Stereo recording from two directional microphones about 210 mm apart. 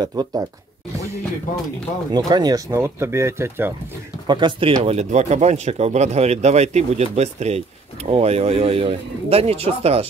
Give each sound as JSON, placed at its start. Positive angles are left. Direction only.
{"t": 0.0, "sound": "speech", "side_deg": -20}
{"t": 2.1, "sound": "speech", "side_deg": -20}
{"t": 4.3, "sound": "speech", "side_deg": -20}